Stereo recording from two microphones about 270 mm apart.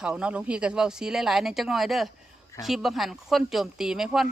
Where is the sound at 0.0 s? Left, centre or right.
Centre.